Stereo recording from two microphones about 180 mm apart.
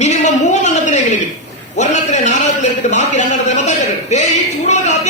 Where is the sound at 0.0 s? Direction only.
40° left (ahead or behind).